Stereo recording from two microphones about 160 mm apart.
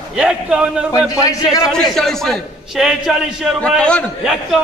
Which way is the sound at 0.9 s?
20° left (ahead or behind).